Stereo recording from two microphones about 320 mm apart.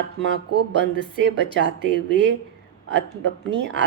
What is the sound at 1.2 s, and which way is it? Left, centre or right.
Speech, right.